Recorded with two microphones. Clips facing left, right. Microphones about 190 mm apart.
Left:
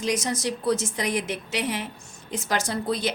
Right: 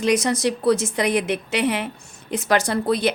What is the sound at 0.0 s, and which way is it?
A woman's voice, 65° right (ahead or behind).